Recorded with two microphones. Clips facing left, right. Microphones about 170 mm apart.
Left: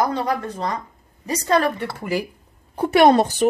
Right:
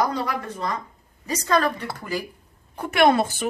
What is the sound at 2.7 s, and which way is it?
Speech, 35° left (ahead or behind).